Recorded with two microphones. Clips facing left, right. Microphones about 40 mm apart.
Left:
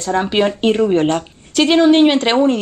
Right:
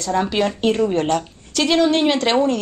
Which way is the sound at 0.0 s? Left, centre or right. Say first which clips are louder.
Left 3 dB; left.